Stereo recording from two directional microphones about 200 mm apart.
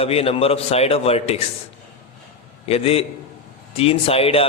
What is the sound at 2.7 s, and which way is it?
A man's voice, 30° left (ahead or behind).